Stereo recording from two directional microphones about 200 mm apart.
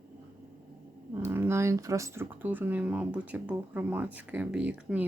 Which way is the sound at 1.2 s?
10° right (ahead or behind).